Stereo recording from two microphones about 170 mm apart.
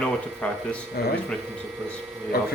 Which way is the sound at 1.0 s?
65° left (ahead or behind).